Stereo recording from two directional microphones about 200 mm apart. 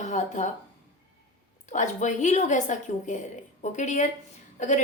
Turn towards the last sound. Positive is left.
turn(degrees=35)  # may be behind; listen again after turning